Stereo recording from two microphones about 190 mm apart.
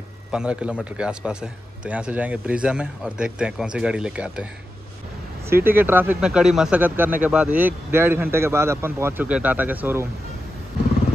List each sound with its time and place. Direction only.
0.3 s a man's voice: 5° right (ahead or behind)
5.5 s speech: 10° right (ahead or behind)